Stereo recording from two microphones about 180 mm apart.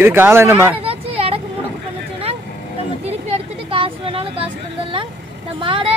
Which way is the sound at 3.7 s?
30° right (ahead or behind).